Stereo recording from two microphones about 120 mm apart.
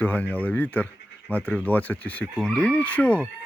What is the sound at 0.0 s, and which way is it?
Speech, 15° left (ahead or behind).